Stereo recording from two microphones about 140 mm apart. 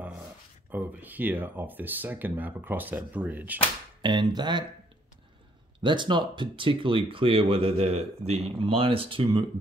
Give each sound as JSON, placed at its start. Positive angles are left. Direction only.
{"t": 0.7, "sound": "speech", "side_deg": -15}
{"t": 4.0, "sound": "speech", "side_deg": -35}
{"t": 5.8, "sound": "speech", "side_deg": -35}